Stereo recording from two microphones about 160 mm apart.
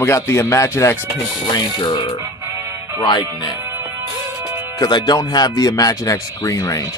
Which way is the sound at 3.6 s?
15° right (ahead or behind).